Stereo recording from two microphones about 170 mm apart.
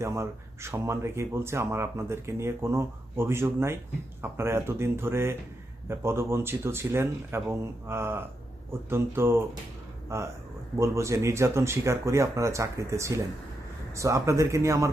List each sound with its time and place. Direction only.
0.0 s speech: 15° right (ahead or behind)